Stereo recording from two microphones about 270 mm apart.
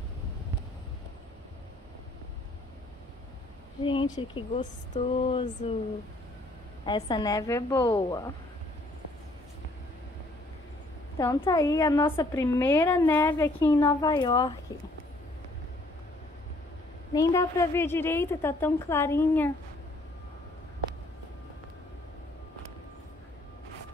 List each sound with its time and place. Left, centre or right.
3.8 s speech: centre
6.9 s a woman's voice: centre
11.1 s a woman's voice: centre
17.1 s a woman's voice: centre